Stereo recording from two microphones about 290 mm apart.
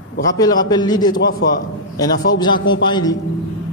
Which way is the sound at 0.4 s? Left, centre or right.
Centre.